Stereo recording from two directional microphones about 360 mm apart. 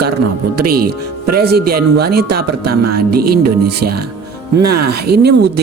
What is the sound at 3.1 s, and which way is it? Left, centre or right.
Speech, right.